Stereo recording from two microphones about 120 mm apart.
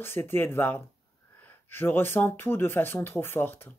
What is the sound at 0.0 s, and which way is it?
Speech, 20° left (ahead or behind).